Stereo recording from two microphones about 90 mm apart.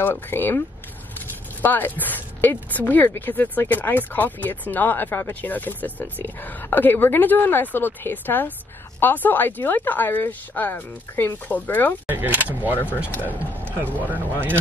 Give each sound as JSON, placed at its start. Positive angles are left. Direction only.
{"t": 0.0, "sound": "speech", "side_deg": 25}
{"t": 12.1, "sound": "speech", "side_deg": -20}